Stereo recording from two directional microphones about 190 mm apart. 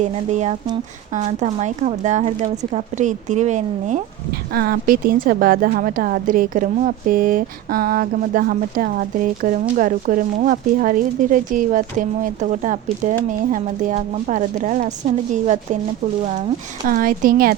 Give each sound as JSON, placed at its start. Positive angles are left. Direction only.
{"t": 0.0, "sound": "speech", "side_deg": -40}
{"t": 4.5, "sound": "a woman's voice", "side_deg": -55}
{"t": 16.8, "sound": "a woman's voice", "side_deg": -45}